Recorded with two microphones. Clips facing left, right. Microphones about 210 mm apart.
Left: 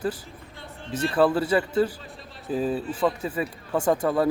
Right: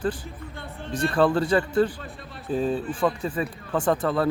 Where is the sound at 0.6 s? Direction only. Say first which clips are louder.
Right 2 dB; 55° right (ahead or behind).